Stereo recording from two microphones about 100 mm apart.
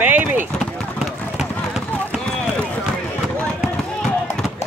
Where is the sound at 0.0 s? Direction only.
20° right (ahead or behind).